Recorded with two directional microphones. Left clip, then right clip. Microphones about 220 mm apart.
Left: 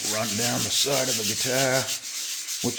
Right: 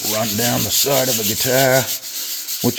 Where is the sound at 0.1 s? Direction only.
30° right (ahead or behind).